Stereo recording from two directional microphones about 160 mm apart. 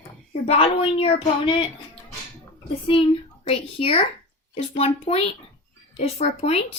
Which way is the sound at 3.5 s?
35° left (ahead or behind).